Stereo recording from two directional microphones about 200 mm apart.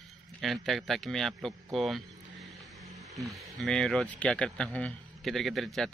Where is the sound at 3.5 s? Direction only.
5° left (ahead or behind).